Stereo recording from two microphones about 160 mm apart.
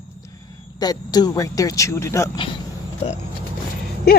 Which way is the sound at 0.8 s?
25° left (ahead or behind).